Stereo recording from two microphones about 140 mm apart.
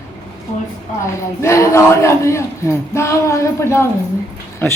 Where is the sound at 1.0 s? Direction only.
20° left (ahead or behind).